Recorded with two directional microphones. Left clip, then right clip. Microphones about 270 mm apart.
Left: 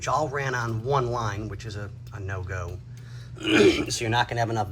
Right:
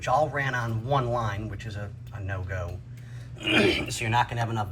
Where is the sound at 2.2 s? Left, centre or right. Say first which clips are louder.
Even; left.